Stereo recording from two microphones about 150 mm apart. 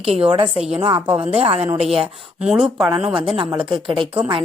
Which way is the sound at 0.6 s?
5° right (ahead or behind).